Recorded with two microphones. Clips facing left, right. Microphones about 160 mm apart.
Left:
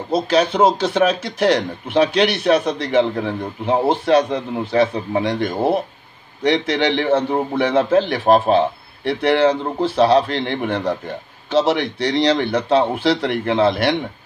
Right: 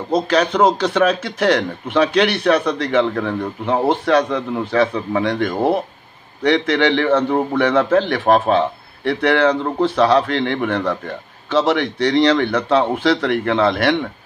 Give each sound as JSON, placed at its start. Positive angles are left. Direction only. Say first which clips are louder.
{"t": 0.3, "sound": "a man's voice", "louder": "left 1 dB", "side_deg": 30}